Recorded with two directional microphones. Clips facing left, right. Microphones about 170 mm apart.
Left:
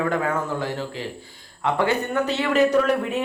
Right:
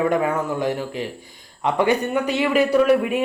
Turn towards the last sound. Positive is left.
turn(degrees=-10)  # may be behind; listen again after turning